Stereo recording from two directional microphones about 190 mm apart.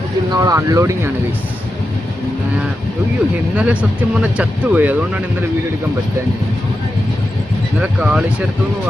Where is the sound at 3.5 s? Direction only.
5° right (ahead or behind).